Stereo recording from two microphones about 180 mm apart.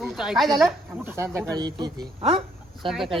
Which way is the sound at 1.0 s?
15° right (ahead or behind).